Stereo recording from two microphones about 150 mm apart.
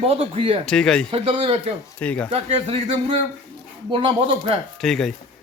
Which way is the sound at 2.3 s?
40° right (ahead or behind).